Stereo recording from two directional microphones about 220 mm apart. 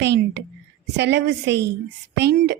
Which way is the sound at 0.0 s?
50° right (ahead or behind).